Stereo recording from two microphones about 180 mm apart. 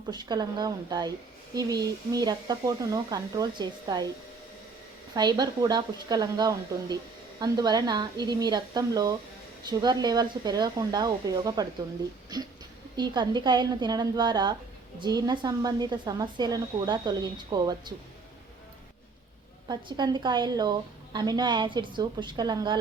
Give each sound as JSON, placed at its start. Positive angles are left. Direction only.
{"t": 0.1, "sound": "a woman's voice", "side_deg": -25}
{"t": 5.1, "sound": "a woman's voice", "side_deg": -20}
{"t": 19.6, "sound": "a woman's voice", "side_deg": -25}